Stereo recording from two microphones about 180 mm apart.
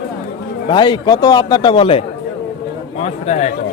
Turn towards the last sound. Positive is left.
turn(degrees=40)  # may be behind; listen again after turning